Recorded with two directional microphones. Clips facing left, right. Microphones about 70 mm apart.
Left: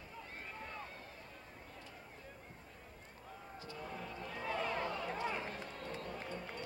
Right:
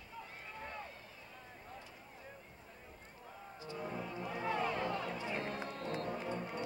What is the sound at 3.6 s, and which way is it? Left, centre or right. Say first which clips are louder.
Music: right 5 dB; right.